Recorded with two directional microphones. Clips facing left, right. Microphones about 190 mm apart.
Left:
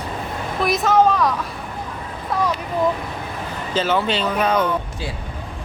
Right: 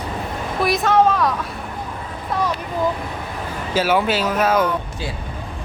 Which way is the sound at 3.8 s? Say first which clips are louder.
Right 2 dB; 10° right (ahead or behind).